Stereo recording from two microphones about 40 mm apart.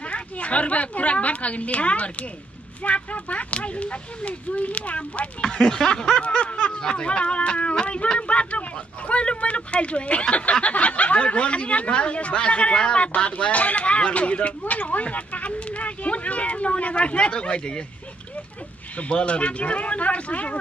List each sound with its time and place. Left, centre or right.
0.1 s a woman's voice: left
5.5 s speech: centre
6.2 s a sound: left
6.8 s speech: left
18.9 s speech: left